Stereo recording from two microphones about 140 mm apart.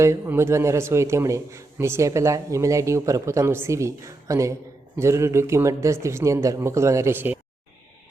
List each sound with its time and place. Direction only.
0.0 s a man's voice: 20° right (ahead or behind)